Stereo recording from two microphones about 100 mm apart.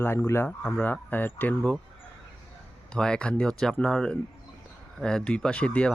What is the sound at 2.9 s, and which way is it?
Speech, 10° left (ahead or behind).